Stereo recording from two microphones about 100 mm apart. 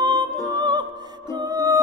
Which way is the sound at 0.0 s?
45° right (ahead or behind).